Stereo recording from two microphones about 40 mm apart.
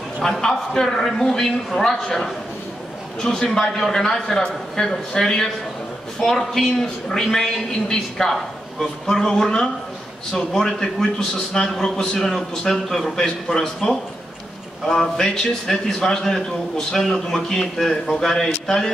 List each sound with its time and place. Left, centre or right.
0.2 s a woman's voice: centre
6.1 s a woman's voice: centre
15.1 s a woman's voice: centre